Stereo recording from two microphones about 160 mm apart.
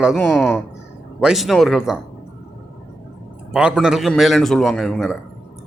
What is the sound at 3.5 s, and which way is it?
Speech, 5° right (ahead or behind).